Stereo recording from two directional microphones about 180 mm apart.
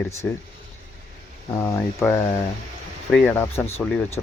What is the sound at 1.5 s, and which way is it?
Speech, 15° left (ahead or behind).